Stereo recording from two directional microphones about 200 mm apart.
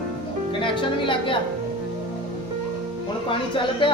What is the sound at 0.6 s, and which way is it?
Speech, 25° left (ahead or behind).